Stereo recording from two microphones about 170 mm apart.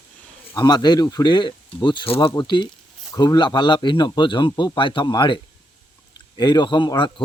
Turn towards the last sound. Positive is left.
turn(degrees=25)  # may be behind; listen again after turning